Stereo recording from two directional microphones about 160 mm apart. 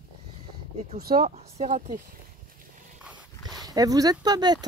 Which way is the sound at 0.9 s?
70° right (ahead or behind).